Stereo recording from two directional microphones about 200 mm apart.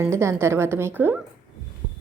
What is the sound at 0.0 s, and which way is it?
Speech, 15° right (ahead or behind).